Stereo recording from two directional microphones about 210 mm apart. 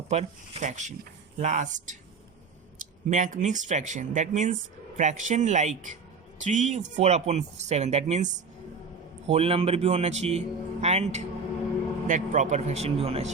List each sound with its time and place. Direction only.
0.1 s speech: 35° right (ahead or behind)
3.1 s speech: 35° right (ahead or behind)